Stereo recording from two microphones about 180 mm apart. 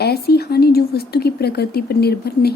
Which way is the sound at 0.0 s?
60° left (ahead or behind).